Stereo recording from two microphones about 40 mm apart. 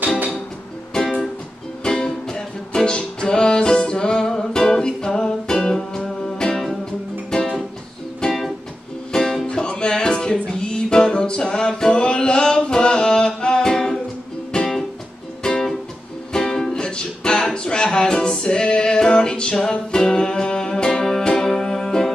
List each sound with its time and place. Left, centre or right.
0.9 s music: centre